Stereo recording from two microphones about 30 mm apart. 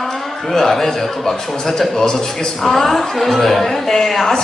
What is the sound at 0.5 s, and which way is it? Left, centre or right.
A woman's voice, centre.